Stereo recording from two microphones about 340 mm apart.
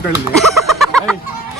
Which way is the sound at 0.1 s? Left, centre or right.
Centre.